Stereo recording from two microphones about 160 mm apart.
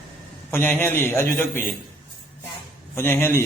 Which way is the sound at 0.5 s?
15° left (ahead or behind).